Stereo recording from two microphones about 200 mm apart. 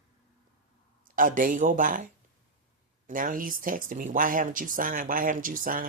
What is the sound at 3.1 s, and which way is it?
Speech, 40° right (ahead or behind).